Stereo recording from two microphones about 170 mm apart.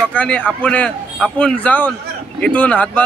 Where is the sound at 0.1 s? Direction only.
10° left (ahead or behind).